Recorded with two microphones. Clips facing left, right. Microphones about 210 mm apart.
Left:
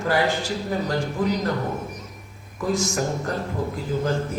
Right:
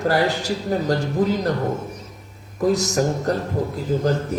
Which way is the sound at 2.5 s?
40° right (ahead or behind).